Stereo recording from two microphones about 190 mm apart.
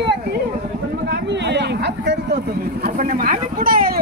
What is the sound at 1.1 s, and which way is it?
Speech, 65° right (ahead or behind).